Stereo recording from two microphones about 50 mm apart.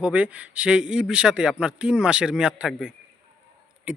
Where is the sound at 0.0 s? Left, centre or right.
Right.